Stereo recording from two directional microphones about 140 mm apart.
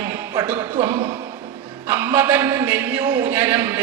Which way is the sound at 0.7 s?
45° right (ahead or behind).